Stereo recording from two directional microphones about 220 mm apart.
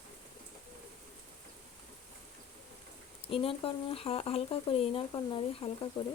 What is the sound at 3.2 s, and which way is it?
Speech, 25° left (ahead or behind).